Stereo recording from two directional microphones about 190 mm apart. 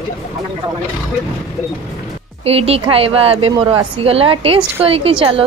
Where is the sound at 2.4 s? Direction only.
30° right (ahead or behind).